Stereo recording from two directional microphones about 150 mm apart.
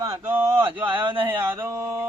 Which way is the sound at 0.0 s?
15° right (ahead or behind).